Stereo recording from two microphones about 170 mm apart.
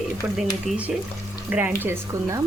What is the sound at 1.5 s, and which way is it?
Speech, 10° right (ahead or behind).